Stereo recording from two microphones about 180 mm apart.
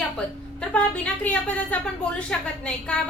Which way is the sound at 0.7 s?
5° left (ahead or behind).